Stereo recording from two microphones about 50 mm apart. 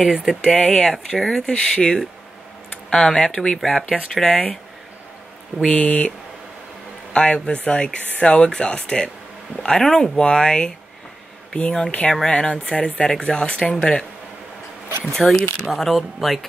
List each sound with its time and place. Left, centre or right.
0.4 s speech: centre
0.9 s speech: centre
4.3 s speech: left
5.7 s a man's voice: left
15.1 s speech: centre